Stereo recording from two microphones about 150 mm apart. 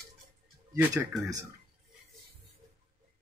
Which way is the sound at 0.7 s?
15° right (ahead or behind).